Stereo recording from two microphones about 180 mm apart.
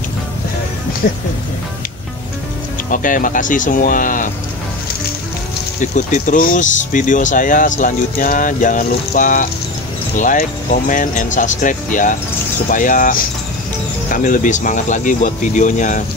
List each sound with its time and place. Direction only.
1.0 s speech: 55° left (ahead or behind)
2.9 s speech: 50° left (ahead or behind)
5.8 s speech: 45° left (ahead or behind)